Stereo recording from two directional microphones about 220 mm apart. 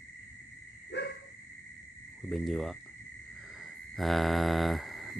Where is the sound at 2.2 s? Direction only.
Centre (ahead or behind).